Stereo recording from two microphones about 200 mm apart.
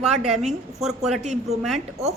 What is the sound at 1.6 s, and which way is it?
Speech, centre (ahead or behind).